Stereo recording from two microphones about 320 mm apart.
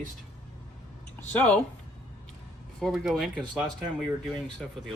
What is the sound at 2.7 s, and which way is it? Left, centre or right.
Speech, centre.